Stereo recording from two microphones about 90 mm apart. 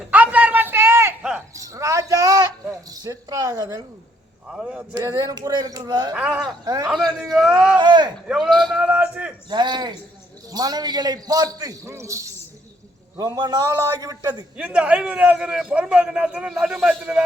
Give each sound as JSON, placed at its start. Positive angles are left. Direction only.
{"t": 0.1, "sound": "a sound", "side_deg": -15}
{"t": 2.9, "sound": "a man's voice", "side_deg": -45}
{"t": 4.5, "sound": "a man's voice", "side_deg": -10}
{"t": 5.1, "sound": "a man's voice", "side_deg": -45}
{"t": 6.1, "sound": "a man's voice", "side_deg": -10}
{"t": 7.8, "sound": "speech", "side_deg": -55}
{"t": 8.3, "sound": "a man's voice", "side_deg": -5}
{"t": 9.5, "sound": "a man's voice", "side_deg": -55}
{"t": 14.5, "sound": "a man's voice", "side_deg": -10}